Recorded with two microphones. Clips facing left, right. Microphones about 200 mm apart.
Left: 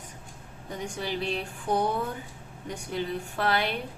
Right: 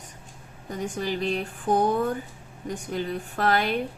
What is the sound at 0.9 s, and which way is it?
Speech, 45° right (ahead or behind).